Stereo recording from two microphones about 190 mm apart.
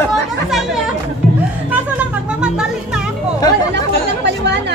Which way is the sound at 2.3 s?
5° right (ahead or behind).